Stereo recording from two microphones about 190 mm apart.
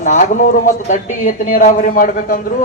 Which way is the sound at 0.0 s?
40° left (ahead or behind).